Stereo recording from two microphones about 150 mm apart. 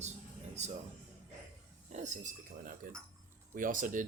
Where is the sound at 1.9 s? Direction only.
55° right (ahead or behind).